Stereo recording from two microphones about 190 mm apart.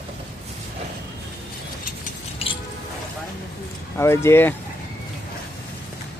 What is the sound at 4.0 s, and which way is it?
Speech, 15° left (ahead or behind).